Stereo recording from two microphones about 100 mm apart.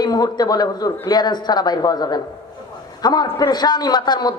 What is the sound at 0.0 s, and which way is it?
A woman's voice, 45° left (ahead or behind).